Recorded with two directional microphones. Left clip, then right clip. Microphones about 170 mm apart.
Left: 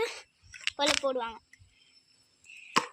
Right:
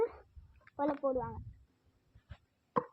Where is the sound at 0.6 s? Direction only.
30° left (ahead or behind).